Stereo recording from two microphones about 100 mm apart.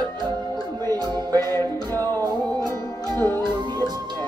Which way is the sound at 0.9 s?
45° right (ahead or behind).